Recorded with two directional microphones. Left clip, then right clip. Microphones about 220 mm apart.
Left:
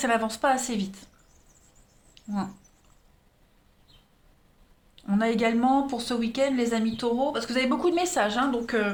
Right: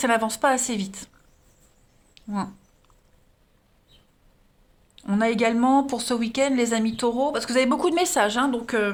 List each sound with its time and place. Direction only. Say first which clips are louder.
0.0 s speech: right 3 dB; 35° right (ahead or behind)
2.1 s a sound: right 3 dB; 35° right (ahead or behind)
4.9 s speech: right 3 dB; 35° right (ahead or behind)